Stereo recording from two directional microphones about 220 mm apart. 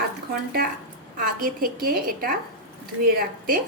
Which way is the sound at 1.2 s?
40° right (ahead or behind).